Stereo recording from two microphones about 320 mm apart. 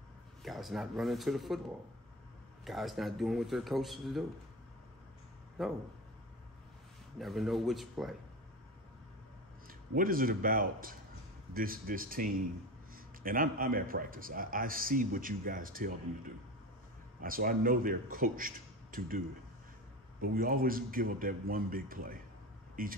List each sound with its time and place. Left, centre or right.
0.4 s a man's voice: centre
2.6 s a man's voice: centre
5.6 s a man's voice: centre
7.2 s a man's voice: centre
9.7 s a man's voice: right
17.2 s a man's voice: right
20.2 s a man's voice: right